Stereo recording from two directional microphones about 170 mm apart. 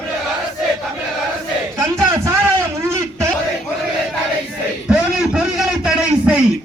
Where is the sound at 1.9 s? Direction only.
20° right (ahead or behind).